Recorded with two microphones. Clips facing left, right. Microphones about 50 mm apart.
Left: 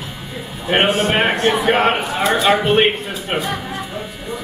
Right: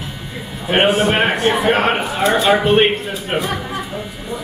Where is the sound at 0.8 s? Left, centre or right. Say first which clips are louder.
Right 5 dB; centre.